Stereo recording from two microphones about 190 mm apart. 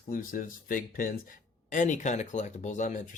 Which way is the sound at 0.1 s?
45° left (ahead or behind).